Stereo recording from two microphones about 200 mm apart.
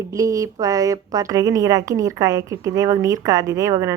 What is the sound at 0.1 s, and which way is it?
A woman's voice, 15° right (ahead or behind).